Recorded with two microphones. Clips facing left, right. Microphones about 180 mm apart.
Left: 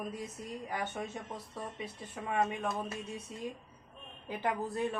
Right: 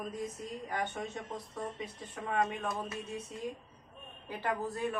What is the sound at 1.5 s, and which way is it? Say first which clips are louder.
Speech: right 1 dB; 10° left (ahead or behind).